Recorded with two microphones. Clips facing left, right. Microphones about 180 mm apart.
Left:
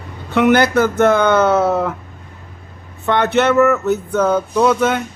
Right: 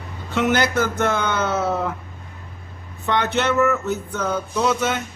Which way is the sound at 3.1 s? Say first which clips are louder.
Left 6 dB; 60° left (ahead or behind).